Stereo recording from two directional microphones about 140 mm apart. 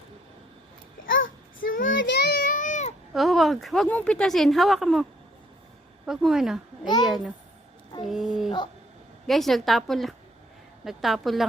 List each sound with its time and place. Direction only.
1.7 s a sound: 80° left; by 2.9 s 60° left (ahead or behind)
3.2 s speech: centre (ahead or behind)
6.1 s speech: 5° right (ahead or behind)